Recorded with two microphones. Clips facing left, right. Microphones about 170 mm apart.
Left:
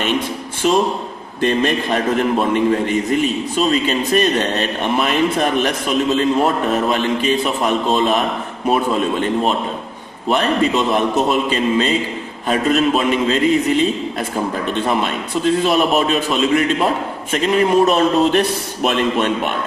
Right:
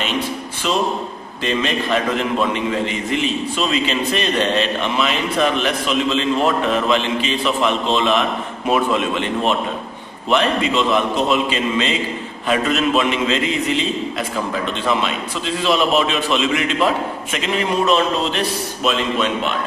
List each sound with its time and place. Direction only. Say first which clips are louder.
1.4 s a man's voice: left 4 dB; 50° left (ahead or behind)
14.9 s a man's voice: left 1 dB; 50° left (ahead or behind)